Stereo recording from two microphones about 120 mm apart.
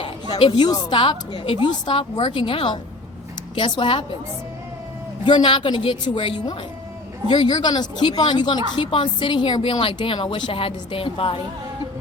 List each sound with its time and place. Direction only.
0.3 s a woman's voice: 45° left (ahead or behind)
5.2 s a woman's voice: 45° left (ahead or behind)